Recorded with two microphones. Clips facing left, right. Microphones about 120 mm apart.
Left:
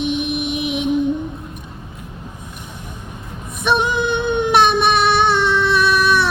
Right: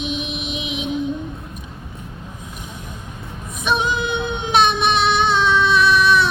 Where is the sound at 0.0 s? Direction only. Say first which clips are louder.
Left 6 dB; 55° left (ahead or behind).